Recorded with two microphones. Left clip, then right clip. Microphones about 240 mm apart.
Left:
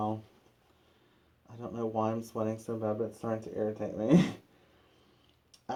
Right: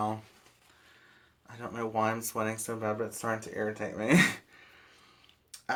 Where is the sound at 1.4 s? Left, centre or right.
Right.